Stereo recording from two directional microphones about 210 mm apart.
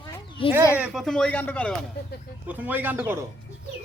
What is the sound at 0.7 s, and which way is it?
Speech, 5° right (ahead or behind).